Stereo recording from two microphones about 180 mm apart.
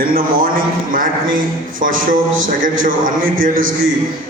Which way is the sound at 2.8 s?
50° right (ahead or behind).